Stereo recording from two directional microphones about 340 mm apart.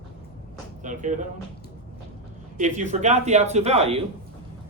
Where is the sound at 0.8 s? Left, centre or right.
Right.